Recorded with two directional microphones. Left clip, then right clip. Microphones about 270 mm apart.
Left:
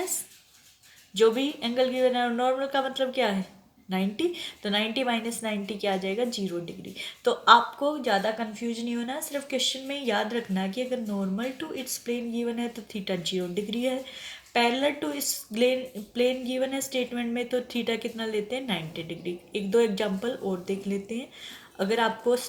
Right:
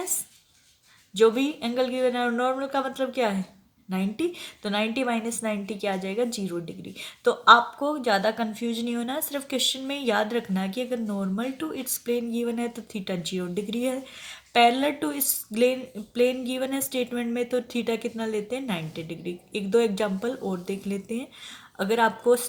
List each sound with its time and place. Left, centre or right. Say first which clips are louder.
1.2 s speech: right 2 dB; right